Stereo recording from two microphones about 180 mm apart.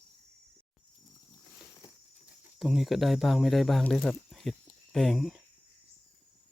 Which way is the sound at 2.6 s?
Centre (ahead or behind).